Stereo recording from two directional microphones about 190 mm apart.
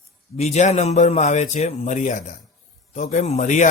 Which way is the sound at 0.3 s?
35° left (ahead or behind).